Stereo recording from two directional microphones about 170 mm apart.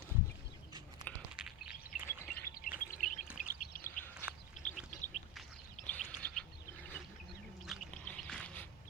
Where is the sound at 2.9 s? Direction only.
50° left (ahead or behind).